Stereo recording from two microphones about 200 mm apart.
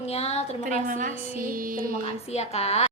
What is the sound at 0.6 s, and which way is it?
A woman's voice, 40° right (ahead or behind).